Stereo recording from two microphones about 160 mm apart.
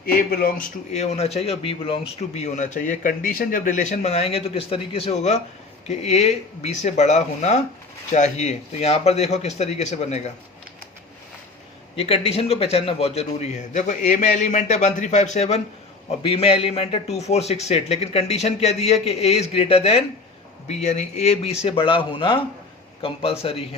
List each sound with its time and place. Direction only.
0.0 s a man's voice: 70° left (ahead or behind)
0.9 s speech: 45° left (ahead or behind)
11.9 s a man's voice: 35° left (ahead or behind)